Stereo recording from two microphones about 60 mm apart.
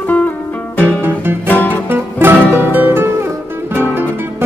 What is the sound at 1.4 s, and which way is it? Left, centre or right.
Music, left.